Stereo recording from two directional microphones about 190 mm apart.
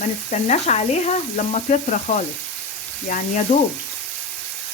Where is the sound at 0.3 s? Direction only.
35° left (ahead or behind).